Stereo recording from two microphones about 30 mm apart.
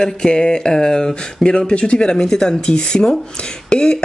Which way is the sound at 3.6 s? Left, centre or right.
Left.